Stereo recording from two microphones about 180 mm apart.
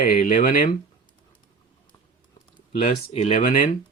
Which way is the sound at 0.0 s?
45° left (ahead or behind).